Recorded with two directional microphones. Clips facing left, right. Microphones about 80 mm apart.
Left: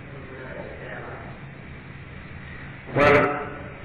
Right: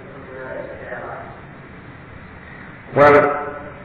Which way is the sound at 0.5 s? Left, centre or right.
Right.